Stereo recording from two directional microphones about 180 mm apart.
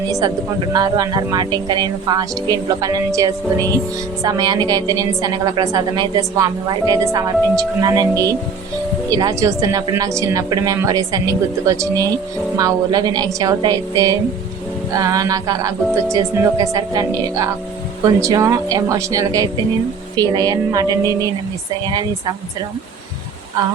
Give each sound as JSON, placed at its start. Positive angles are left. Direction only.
{"t": 0.7, "sound": "a woman's voice", "side_deg": -20}